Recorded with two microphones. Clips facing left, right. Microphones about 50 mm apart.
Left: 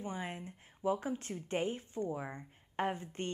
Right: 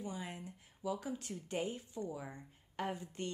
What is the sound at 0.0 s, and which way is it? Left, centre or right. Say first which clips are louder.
A woman's voice: left 3 dB; left.